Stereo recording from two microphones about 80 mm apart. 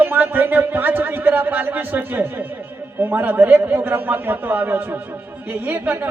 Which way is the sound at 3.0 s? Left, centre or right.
Right.